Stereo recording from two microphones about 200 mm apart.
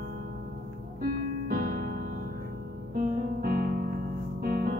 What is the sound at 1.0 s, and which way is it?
Music, 50° right (ahead or behind).